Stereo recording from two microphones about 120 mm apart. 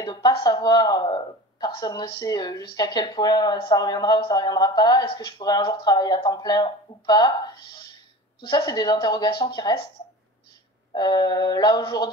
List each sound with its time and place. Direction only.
0.0 s a woman's voice: 30° left (ahead or behind)
11.0 s a woman's voice: 35° left (ahead or behind)